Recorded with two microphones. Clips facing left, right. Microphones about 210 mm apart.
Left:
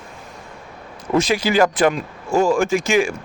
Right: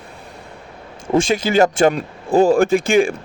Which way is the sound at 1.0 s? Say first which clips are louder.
Right 1 dB; 30° right (ahead or behind).